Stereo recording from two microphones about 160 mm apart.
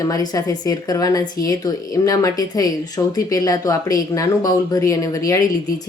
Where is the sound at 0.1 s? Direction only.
25° left (ahead or behind).